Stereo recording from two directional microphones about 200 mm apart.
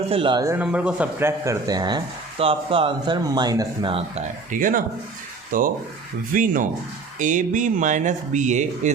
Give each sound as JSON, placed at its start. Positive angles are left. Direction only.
{"t": 0.1, "sound": "speech", "side_deg": -25}
{"t": 4.5, "sound": "speech", "side_deg": -45}